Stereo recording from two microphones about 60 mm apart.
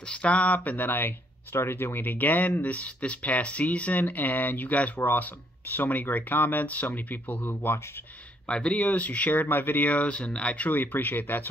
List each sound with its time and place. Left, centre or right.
0.0 s speech: centre